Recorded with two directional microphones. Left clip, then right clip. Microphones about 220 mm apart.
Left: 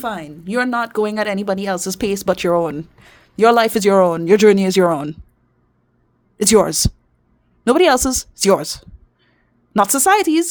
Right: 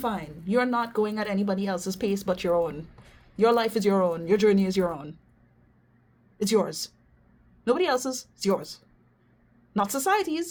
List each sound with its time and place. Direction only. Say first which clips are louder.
0.0 s speech: left 6 dB; 50° left (ahead or behind)
6.3 s a woman's voice: left 11 dB; 55° left (ahead or behind)